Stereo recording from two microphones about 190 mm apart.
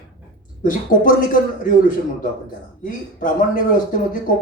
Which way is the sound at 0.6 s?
45° left (ahead or behind).